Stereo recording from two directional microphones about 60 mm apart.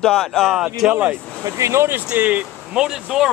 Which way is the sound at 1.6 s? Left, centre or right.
Right.